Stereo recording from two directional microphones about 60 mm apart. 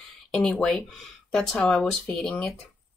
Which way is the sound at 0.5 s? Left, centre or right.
Centre.